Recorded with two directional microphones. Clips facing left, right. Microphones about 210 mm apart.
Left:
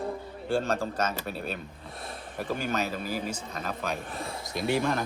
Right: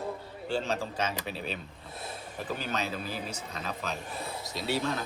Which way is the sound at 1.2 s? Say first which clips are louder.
Left 2 dB; 50° left (ahead or behind).